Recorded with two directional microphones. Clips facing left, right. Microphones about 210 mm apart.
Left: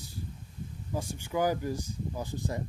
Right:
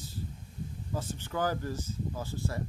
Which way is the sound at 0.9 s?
10° left (ahead or behind).